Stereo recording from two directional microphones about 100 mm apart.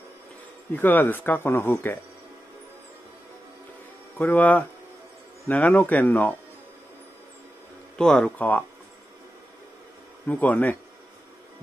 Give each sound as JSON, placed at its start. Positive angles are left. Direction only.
{"t": 0.7, "sound": "speech", "side_deg": 20}
{"t": 4.2, "sound": "speech", "side_deg": 15}
{"t": 8.0, "sound": "speech", "side_deg": 10}
{"t": 10.2, "sound": "speech", "side_deg": 15}